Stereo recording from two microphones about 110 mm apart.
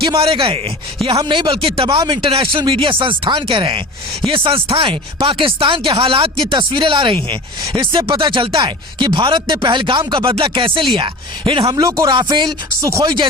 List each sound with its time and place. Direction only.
0.0 s speech: 55° right (ahead or behind)
11.6 s a man's voice: 30° right (ahead or behind)
12.1 s speech: 45° right (ahead or behind)
12.8 s speech: 30° right (ahead or behind)